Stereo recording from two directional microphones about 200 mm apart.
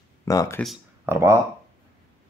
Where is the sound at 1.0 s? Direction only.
10° right (ahead or behind).